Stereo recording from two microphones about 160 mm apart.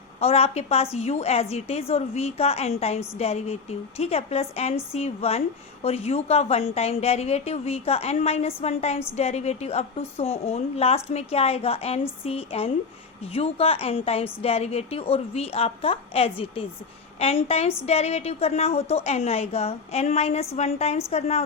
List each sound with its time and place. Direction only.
0.2 s a woman's voice: 40° left (ahead or behind)